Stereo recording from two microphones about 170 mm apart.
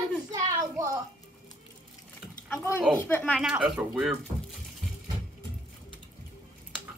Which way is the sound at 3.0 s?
10° left (ahead or behind).